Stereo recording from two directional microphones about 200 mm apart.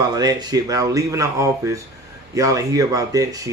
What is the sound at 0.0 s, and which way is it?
Speech, 20° right (ahead or behind).